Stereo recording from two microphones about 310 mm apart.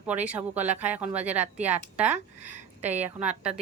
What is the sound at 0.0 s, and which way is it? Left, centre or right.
A woman's voice, centre.